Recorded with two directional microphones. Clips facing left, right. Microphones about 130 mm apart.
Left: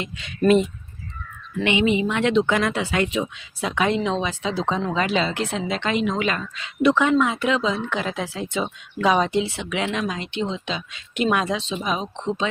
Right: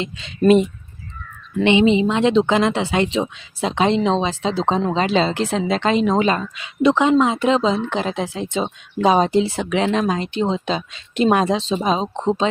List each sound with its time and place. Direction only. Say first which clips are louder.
0.0 s a woman's voice: right 3 dB; 25° right (ahead or behind)
6.4 s a woman's voice: right 2 dB; 20° right (ahead or behind); by 12.5 s 40° right (ahead or behind)